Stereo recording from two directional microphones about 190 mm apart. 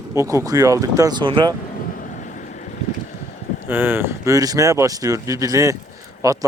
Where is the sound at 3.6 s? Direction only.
10° right (ahead or behind).